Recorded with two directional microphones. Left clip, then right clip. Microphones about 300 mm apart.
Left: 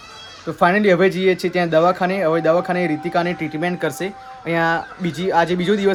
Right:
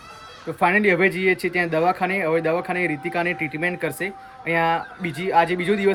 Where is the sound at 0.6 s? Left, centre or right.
Centre.